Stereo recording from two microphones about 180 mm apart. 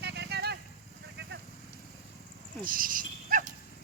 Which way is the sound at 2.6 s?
50° right (ahead or behind).